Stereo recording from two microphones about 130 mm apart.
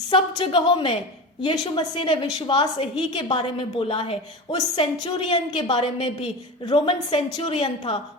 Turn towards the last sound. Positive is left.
turn(degrees=35)  # may be behind; listen again after turning